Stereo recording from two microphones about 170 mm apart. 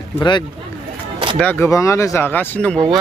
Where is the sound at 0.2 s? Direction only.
25° left (ahead or behind).